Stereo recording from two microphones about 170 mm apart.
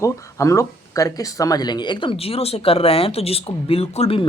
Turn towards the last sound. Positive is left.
turn(degrees=35)  # may be behind; listen again after turning